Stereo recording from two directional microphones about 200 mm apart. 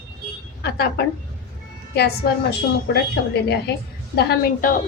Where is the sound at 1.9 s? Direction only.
55° left (ahead or behind).